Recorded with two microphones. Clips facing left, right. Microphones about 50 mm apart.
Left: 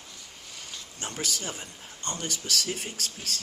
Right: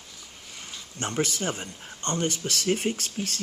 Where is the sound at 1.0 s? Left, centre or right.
Right.